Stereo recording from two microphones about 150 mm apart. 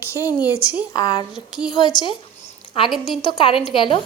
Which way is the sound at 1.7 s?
30° left (ahead or behind).